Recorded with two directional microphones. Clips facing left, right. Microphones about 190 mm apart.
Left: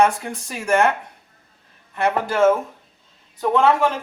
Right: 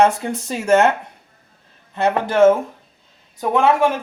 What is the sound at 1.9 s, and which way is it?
Speech, 20° right (ahead or behind).